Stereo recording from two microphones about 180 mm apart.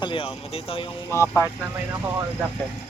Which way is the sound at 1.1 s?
15° left (ahead or behind).